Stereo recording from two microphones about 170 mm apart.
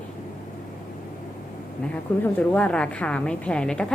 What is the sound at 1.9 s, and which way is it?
A woman's voice, 10° left (ahead or behind).